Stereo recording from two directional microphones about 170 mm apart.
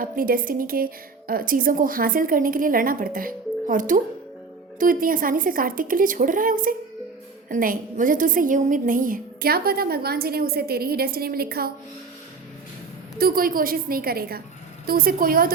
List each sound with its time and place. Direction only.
0.0 s a woman's voice: 55° right (ahead or behind)
13.1 s a woman's voice: 60° right (ahead or behind)